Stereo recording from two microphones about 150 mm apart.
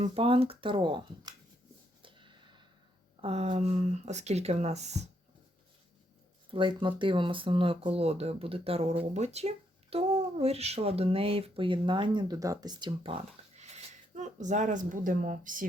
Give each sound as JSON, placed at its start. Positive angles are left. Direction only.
{"t": 0.0, "sound": "speech", "side_deg": -40}
{"t": 2.0, "sound": "a sound", "side_deg": -35}
{"t": 3.2, "sound": "speech", "side_deg": -40}
{"t": 6.5, "sound": "speech", "side_deg": -35}
{"t": 13.0, "sound": "speech", "side_deg": -40}